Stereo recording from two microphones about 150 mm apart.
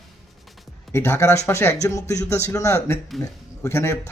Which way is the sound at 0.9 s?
15° left (ahead or behind).